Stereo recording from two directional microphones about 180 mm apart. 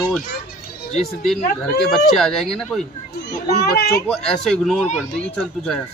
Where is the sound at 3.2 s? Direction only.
65° left (ahead or behind).